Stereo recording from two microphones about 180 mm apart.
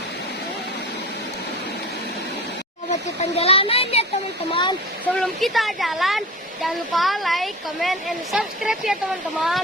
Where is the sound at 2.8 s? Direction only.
35° left (ahead or behind).